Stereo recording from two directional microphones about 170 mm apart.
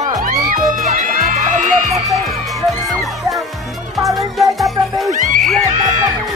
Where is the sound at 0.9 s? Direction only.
50° right (ahead or behind).